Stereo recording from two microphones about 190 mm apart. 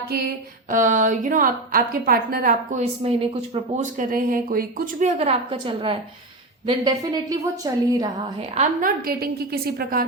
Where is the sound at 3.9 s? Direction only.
45° right (ahead or behind).